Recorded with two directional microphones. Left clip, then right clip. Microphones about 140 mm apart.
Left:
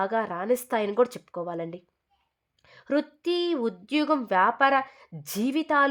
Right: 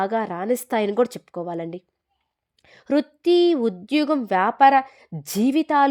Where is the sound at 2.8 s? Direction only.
40° right (ahead or behind).